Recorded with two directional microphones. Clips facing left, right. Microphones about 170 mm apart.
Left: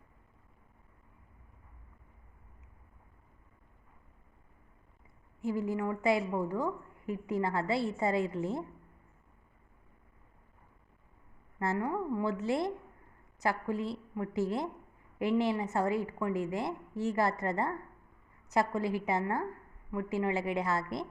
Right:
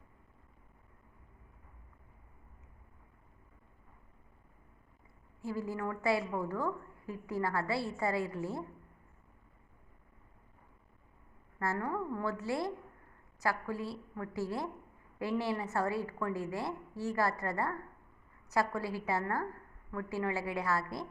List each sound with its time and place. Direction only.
5.4 s a woman's voice: 20° left (ahead or behind)
11.6 s a woman's voice: 15° left (ahead or behind)